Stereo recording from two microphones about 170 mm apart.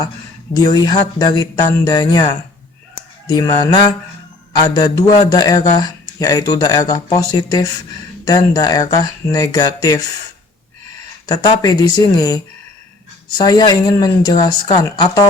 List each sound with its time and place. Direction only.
0.5 s speech: 25° left (ahead or behind)
3.2 s speech: 25° left (ahead or behind)
11.3 s speech: 20° left (ahead or behind)